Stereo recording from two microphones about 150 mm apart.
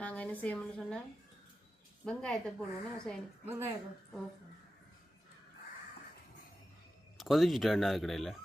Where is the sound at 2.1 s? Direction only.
5° left (ahead or behind).